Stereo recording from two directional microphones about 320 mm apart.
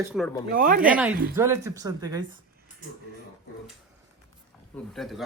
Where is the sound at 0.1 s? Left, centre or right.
Centre.